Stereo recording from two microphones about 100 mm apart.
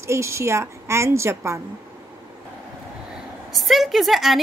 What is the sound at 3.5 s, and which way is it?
Speech, centre (ahead or behind).